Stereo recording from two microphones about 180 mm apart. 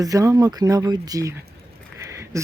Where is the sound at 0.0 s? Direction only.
20° right (ahead or behind).